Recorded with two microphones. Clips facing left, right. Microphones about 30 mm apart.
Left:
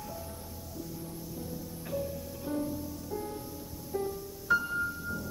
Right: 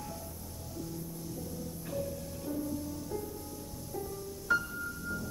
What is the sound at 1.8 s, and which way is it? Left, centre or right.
Music, centre.